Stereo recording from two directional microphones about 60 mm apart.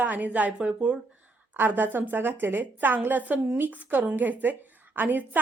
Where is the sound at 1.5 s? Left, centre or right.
Right.